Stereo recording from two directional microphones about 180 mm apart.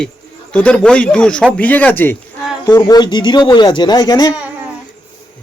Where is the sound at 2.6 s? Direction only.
20° left (ahead or behind).